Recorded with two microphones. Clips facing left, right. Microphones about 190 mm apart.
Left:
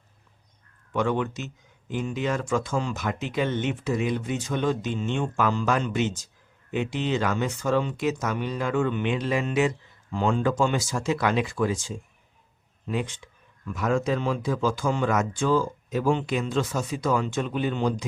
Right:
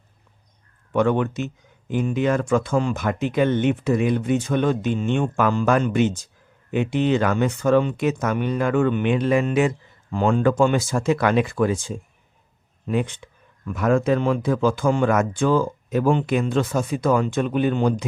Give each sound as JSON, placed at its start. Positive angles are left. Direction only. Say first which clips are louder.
{"t": 0.9, "sound": "speech", "louder": "right 6 dB", "side_deg": -55}